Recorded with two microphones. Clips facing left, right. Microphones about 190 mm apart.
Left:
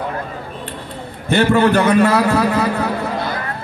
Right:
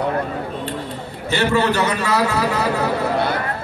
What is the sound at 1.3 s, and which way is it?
A man's voice, 55° left (ahead or behind).